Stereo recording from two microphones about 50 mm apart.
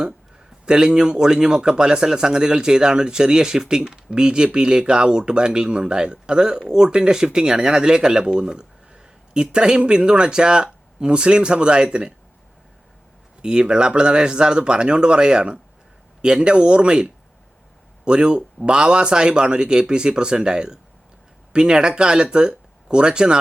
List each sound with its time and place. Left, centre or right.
0.6 s speech: centre
13.4 s speech: centre